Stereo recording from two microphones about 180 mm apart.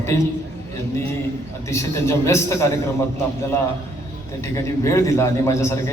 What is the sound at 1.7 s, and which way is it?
A man's voice, 15° left (ahead or behind).